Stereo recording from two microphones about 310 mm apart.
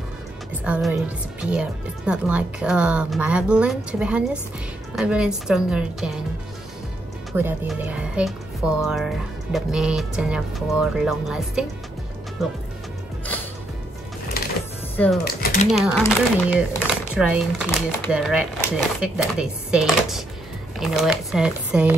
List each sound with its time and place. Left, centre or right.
0.5 s speech: centre
7.3 s speech: centre
15.2 s typewriter: left
15.7 s speech: centre